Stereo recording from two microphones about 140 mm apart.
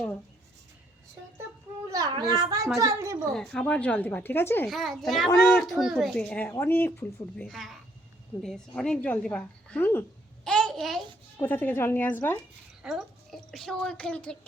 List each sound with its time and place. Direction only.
1.9 s a child's voice: 30° right (ahead or behind)
3.3 s a woman's voice: 5° left (ahead or behind)
4.7 s a child's voice: centre (ahead or behind)
7.3 s a child's voice: centre (ahead or behind)
10.4 s babbling: 5° left (ahead or behind)
11.3 s a woman's voice: 15° left (ahead or behind)
12.8 s a woman's voice: 5° right (ahead or behind)